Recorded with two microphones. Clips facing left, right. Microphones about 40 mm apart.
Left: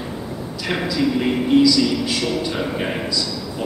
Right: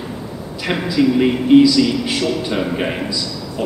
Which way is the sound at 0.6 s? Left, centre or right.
Centre.